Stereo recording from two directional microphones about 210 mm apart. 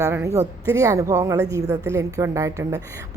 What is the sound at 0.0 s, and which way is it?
A woman's voice, 10° right (ahead or behind).